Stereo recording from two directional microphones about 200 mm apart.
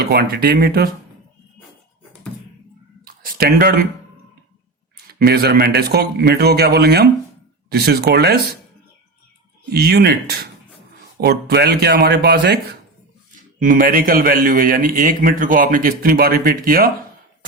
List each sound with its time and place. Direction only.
0.0 s a man's voice: 50° right (ahead or behind)
3.0 s a sound: 45° right (ahead or behind)
5.0 s a man's voice: 50° right (ahead or behind)
9.6 s a man's voice: 50° right (ahead or behind)
13.3 s a man's voice: 40° right (ahead or behind)